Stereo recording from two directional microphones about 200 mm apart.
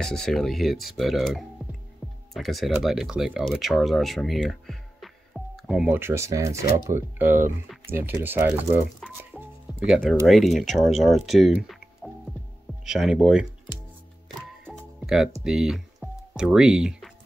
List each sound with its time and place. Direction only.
0.0 s speech: centre (ahead or behind)
1.6 s music: 10° left (ahead or behind)
2.3 s speech: centre (ahead or behind)
14.6 s music: 5° right (ahead or behind)
15.4 s speech: centre (ahead or behind)